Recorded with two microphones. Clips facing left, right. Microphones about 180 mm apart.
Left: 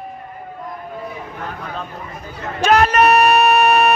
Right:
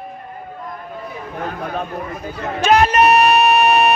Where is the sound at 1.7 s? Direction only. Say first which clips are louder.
Right 5 dB; 60° right (ahead or behind).